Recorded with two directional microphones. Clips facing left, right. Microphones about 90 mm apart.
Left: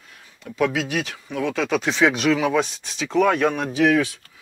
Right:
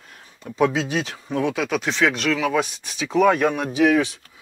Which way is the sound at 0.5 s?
25° right (ahead or behind).